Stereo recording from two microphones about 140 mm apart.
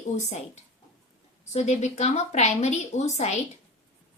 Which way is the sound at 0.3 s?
55° left (ahead or behind).